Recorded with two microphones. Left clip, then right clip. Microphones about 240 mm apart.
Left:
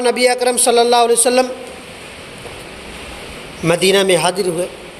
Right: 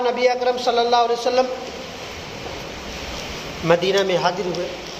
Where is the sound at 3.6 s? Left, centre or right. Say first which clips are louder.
Left 5 dB; left.